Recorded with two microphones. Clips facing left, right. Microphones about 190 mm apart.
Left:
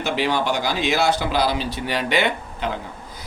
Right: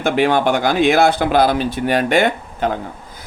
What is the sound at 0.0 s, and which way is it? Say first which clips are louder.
Speech: right 7 dB; 55° right (ahead or behind).